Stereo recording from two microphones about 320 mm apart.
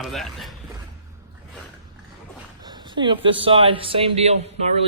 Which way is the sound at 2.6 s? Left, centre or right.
Centre.